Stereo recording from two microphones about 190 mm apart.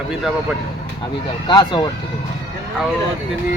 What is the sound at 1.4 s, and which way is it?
Speech, 20° left (ahead or behind).